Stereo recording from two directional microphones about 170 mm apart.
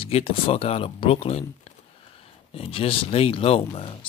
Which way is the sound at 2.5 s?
35° left (ahead or behind).